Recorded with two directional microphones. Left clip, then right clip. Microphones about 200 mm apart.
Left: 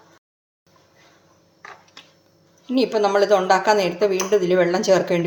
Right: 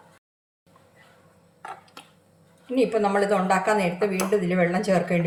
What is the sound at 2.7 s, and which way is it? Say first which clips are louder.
A woman's voice: left 3 dB; 35° left (ahead or behind).